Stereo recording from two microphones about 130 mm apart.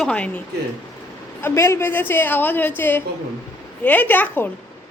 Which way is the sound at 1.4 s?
20° left (ahead or behind).